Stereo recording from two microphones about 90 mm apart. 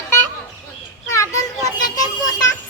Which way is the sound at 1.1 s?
40° left (ahead or behind).